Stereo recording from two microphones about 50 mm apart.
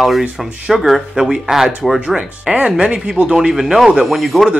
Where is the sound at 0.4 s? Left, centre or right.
Centre.